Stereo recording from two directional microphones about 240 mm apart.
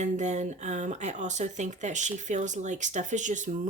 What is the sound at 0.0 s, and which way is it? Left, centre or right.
Speech, right.